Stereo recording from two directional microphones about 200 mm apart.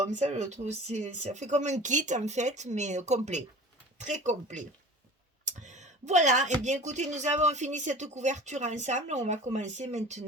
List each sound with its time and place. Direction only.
0.1 s speech: 35° right (ahead or behind)